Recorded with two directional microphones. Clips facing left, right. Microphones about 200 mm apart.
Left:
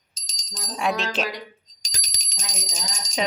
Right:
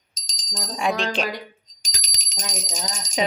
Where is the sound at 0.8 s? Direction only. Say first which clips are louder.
Right 1 dB; centre (ahead or behind).